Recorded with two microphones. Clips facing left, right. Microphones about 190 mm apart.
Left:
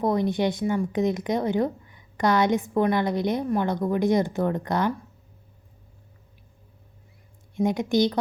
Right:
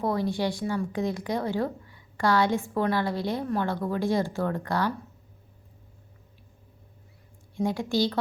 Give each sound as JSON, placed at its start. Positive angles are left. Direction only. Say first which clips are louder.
{"t": 0.0, "sound": "speech", "louder": "left 4 dB", "side_deg": 20}
{"t": 7.5, "sound": "speech", "louder": "left 4 dB", "side_deg": 20}